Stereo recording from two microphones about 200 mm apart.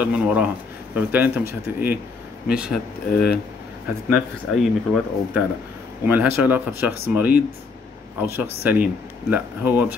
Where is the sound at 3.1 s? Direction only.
50° left (ahead or behind).